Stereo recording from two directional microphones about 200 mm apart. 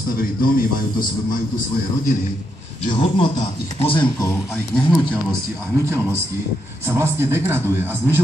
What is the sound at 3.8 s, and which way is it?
Speech, 25° left (ahead or behind).